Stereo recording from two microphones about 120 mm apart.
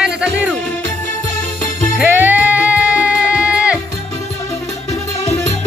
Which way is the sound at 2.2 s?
15° right (ahead or behind).